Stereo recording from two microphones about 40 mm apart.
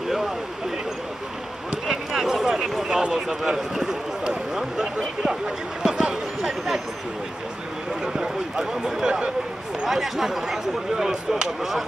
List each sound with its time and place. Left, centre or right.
1.9 s a sound: centre
3.1 s speech: centre
7.9 s speech: centre
9.8 s speech: centre